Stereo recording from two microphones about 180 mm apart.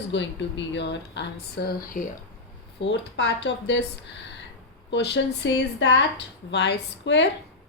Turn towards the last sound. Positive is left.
turn(degrees=75)  # may be behind; listen again after turning